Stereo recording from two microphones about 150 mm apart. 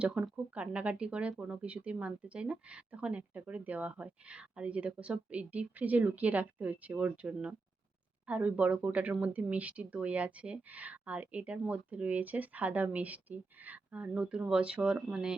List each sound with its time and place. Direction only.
0.0 s speech: 5° right (ahead or behind)